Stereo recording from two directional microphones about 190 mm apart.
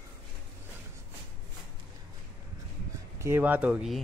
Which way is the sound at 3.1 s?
10° right (ahead or behind).